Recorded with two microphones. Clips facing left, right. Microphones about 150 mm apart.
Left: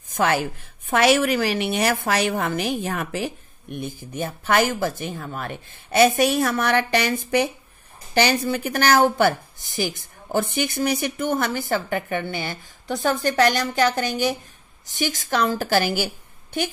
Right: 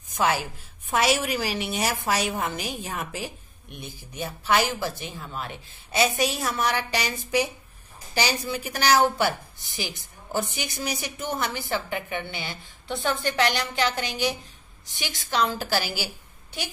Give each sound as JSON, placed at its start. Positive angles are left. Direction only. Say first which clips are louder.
{"t": 0.1, "sound": "a woman's voice", "louder": "left 3 dB", "side_deg": 55}
{"t": 3.7, "sound": "a woman's voice", "louder": "left 8 dB", "side_deg": 50}